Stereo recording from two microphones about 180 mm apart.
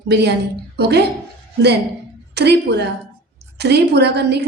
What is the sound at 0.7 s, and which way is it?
Speech, 65° right (ahead or behind).